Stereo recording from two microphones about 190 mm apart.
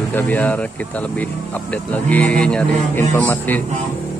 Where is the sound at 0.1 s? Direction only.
10° left (ahead or behind).